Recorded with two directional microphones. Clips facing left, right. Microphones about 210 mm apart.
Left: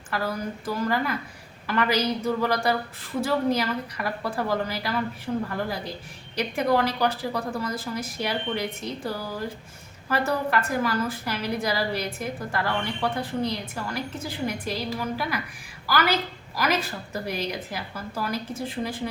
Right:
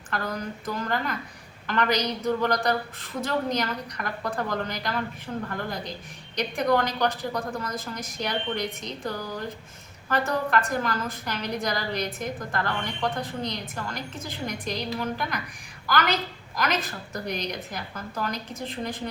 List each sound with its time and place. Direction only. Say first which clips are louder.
0.1 s a woman's voice: left 2 dB; 5° left (ahead or behind)